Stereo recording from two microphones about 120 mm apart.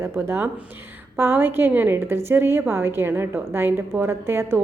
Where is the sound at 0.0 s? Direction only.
20° right (ahead or behind).